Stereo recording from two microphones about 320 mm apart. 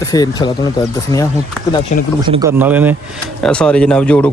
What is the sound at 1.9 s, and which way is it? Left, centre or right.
Speech, left.